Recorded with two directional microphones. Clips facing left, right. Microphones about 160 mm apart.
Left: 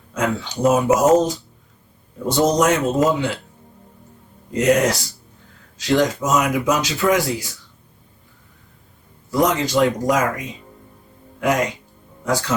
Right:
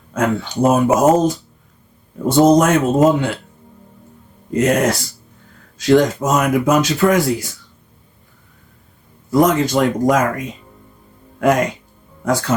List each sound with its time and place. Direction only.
0.1 s speech: 55° right (ahead or behind)
4.5 s speech: 50° right (ahead or behind)
9.3 s speech: 50° right (ahead or behind)